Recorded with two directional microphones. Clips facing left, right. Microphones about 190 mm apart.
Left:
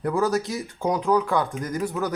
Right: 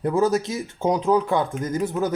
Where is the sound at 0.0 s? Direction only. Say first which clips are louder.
Right 3 dB; 20° right (ahead or behind).